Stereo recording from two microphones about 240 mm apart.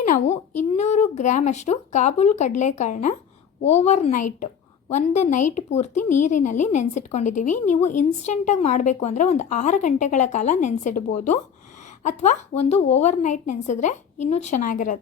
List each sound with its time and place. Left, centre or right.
0.0 s a woman's voice: left
6.0 s speech: left
6.2 s a woman's voice: left